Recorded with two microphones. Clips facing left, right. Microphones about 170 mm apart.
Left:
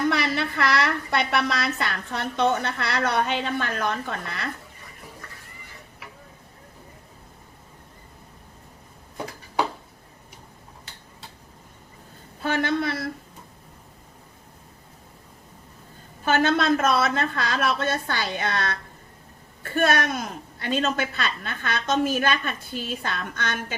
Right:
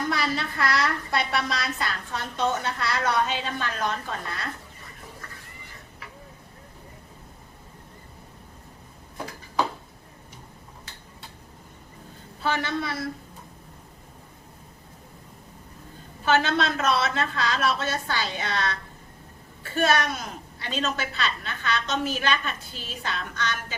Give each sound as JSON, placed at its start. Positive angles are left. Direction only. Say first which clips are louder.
{"t": 0.1, "sound": "a woman's voice", "louder": "left 3 dB", "side_deg": 65}
{"t": 12.4, "sound": "a woman's voice", "louder": "left 3 dB", "side_deg": 50}
{"t": 16.2, "sound": "a woman's voice", "louder": "left 2 dB", "side_deg": 50}